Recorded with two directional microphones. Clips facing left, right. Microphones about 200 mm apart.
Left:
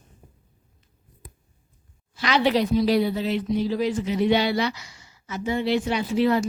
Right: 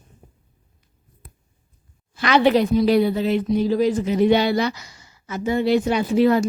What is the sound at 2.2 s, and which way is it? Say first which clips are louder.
A woman's voice: right 5 dB; 55° right (ahead or behind).